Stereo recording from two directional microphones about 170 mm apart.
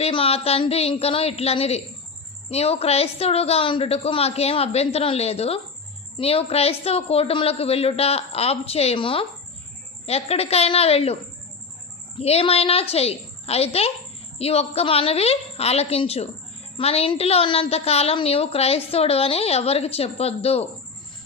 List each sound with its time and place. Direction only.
0.0 s a woman's voice: 35° left (ahead or behind)